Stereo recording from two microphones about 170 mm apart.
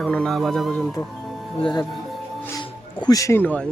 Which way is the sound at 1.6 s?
25° left (ahead or behind).